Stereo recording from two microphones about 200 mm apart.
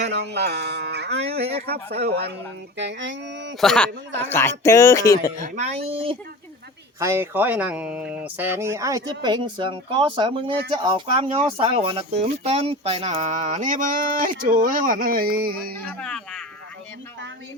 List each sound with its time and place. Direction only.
0.1 s speech: 55° right (ahead or behind)
3.6 s speech: 5° left (ahead or behind)
5.4 s speech: 35° right (ahead or behind)
7.0 s speech: 10° right (ahead or behind); by 15.8 s 50° right (ahead or behind)
16.0 s speech: 5° left (ahead or behind)